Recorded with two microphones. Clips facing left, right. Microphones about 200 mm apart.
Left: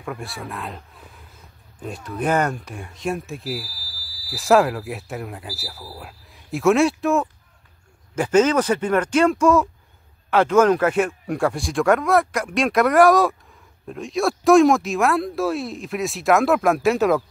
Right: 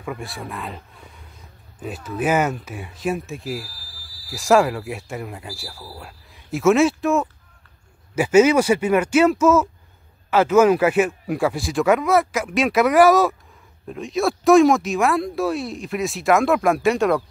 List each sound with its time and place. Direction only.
0.0 s speech: centre (ahead or behind)